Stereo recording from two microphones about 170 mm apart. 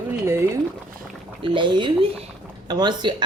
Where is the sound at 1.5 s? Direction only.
30° right (ahead or behind).